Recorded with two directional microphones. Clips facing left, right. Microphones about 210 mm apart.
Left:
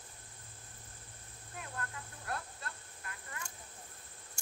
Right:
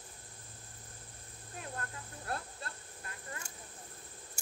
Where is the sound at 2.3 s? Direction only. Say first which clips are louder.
Right 2 dB; 30° right (ahead or behind).